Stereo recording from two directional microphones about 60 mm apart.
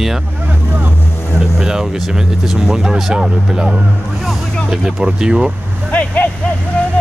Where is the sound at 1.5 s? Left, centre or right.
Centre.